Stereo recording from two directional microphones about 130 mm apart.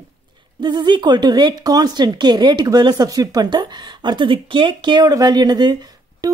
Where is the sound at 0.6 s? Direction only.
35° right (ahead or behind).